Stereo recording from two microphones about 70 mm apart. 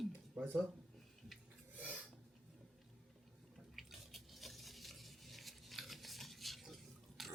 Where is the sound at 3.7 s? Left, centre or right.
Centre.